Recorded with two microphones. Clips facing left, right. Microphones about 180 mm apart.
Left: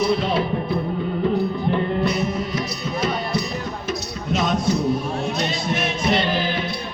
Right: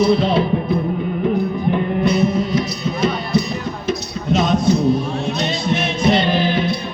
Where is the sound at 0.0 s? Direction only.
25° right (ahead or behind).